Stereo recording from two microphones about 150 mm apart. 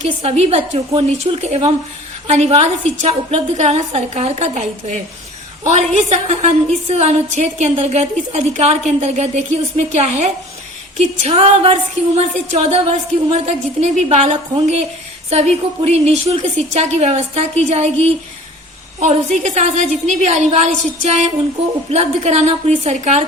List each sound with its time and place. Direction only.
0.2 s a woman's voice: 45° right (ahead or behind)